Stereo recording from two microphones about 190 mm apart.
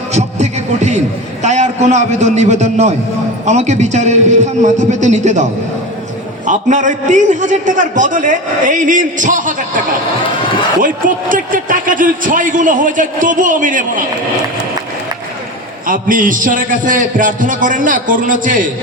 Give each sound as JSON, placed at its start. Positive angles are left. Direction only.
{"t": 0.1, "sound": "a man's voice", "side_deg": -35}
{"t": 10.8, "sound": "a man's voice", "side_deg": -45}
{"t": 15.9, "sound": "a man's voice", "side_deg": -45}